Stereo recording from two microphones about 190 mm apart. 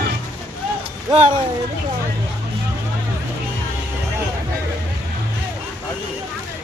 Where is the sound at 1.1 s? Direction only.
35° right (ahead or behind).